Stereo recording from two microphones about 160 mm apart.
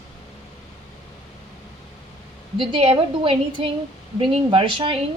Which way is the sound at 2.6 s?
35° right (ahead or behind).